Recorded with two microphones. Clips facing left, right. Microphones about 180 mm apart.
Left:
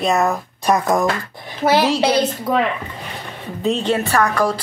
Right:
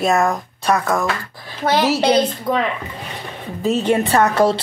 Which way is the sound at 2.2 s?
5° left (ahead or behind).